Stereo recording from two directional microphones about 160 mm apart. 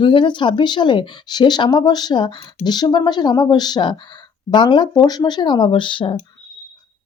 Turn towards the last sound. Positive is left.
turn(degrees=30)  # may be behind; listen again after turning